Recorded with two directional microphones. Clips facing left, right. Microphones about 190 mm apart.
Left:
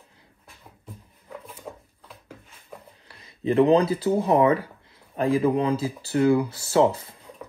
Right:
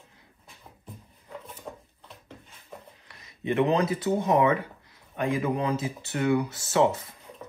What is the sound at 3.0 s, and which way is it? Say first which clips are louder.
Speech: left 5 dB; 30° left (ahead or behind).